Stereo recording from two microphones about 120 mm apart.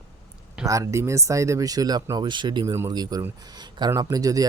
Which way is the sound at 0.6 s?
25° right (ahead or behind).